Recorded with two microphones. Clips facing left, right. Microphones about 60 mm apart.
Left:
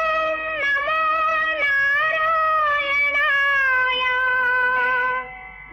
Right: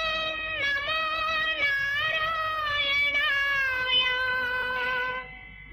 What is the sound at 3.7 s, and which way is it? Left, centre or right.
Cat, left.